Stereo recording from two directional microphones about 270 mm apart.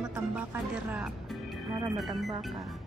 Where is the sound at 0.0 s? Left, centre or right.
Centre.